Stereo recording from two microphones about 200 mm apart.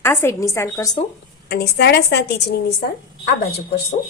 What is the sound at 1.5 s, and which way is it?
Speech, 55° left (ahead or behind).